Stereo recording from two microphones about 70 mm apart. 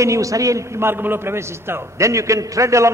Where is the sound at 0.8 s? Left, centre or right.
Right.